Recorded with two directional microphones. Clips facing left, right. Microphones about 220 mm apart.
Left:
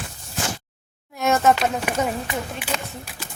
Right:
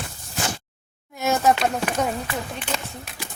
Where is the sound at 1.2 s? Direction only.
Centre (ahead or behind).